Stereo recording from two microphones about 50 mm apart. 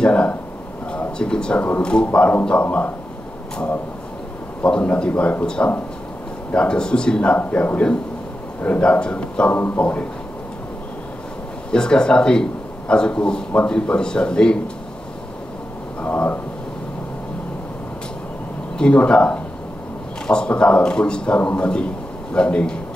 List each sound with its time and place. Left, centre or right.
0.0 s a sound: left
0.9 s a man's voice: centre
2.0 s a man's voice: left
4.6 s a man's voice: left
6.5 s a man's voice: left
7.3 s a man's voice: left
11.7 s a man's voice: centre
16.0 s a sound: left
18.8 s a man's voice: centre